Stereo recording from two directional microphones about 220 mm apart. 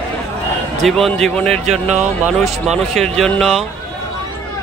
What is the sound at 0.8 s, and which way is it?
Speech, centre (ahead or behind).